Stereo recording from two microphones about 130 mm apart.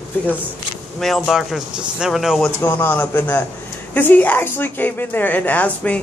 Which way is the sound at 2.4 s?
15° left (ahead or behind).